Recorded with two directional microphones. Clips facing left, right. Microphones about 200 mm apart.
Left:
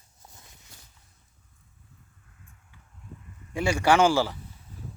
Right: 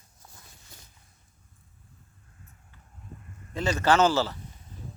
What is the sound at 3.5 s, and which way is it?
Speech, 10° left (ahead or behind).